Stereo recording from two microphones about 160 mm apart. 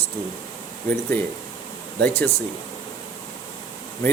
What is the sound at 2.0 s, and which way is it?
Speech, 10° left (ahead or behind).